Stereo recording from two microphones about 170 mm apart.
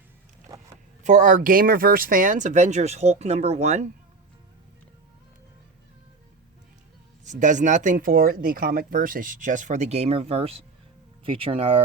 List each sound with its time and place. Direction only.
0.5 s vehicle: 20° right (ahead or behind)
1.0 s speech: 50° right (ahead or behind)
7.3 s speech: 45° right (ahead or behind)